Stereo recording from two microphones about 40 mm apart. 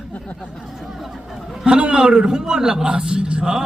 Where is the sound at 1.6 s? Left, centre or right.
Right.